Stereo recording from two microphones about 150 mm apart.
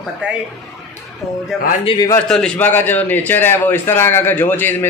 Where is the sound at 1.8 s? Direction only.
35° left (ahead or behind).